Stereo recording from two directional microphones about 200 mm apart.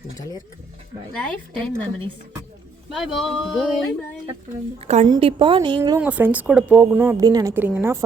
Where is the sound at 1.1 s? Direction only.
5° left (ahead or behind).